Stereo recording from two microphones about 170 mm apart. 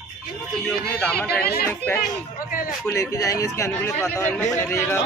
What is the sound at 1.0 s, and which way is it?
Speech, 10° left (ahead or behind).